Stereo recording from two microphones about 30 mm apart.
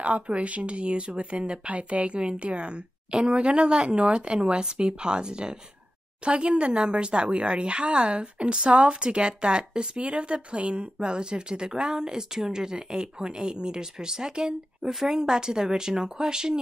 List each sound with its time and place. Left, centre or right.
0.0 s speech: right; by 14.9 s centre
14.9 s a woman's voice: centre
15.1 s speech: right